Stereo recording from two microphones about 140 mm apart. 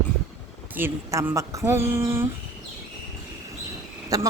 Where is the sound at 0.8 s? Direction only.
15° right (ahead or behind).